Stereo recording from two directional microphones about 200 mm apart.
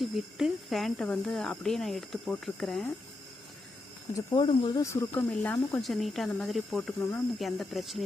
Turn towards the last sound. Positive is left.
turn(degrees=0)  # may be behind; listen again after turning